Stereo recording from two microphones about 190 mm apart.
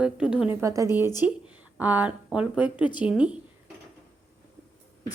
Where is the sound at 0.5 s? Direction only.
15° right (ahead or behind).